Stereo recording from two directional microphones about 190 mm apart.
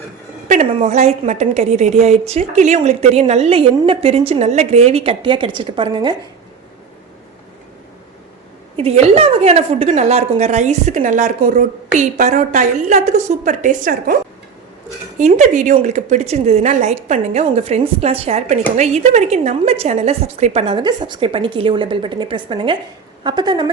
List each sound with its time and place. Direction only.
0.4 s a woman's voice: 40° right (ahead or behind); by 6.1 s 25° right (ahead or behind)
8.7 s a woman's voice: 30° right (ahead or behind)
15.2 s a woman's voice: 40° right (ahead or behind); by 23.6 s 25° right (ahead or behind)